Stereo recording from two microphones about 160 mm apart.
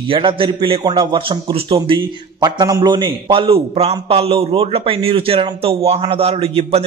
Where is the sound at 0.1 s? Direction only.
30° right (ahead or behind).